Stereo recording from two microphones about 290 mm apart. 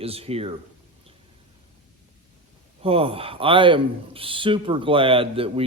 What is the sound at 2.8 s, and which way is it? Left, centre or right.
Speech, centre.